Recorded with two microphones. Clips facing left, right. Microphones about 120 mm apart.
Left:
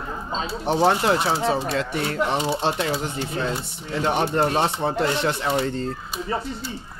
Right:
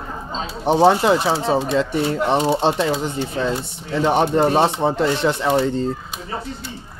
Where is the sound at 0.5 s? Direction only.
25° right (ahead or behind).